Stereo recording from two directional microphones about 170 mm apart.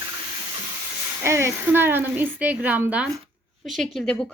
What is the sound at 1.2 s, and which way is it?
A woman's voice, 15° right (ahead or behind).